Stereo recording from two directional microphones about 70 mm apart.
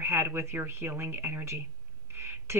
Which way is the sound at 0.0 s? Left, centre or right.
Right.